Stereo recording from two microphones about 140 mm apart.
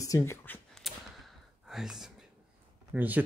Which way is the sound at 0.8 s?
Centre (ahead or behind).